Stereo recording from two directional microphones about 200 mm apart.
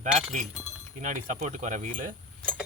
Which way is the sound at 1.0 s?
40° right (ahead or behind).